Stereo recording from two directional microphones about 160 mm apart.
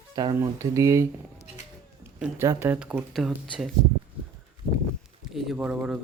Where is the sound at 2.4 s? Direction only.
15° right (ahead or behind); by 3.7 s centre (ahead or behind).